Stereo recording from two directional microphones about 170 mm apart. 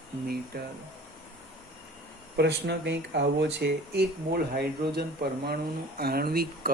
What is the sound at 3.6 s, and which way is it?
Speech, 75° right (ahead or behind).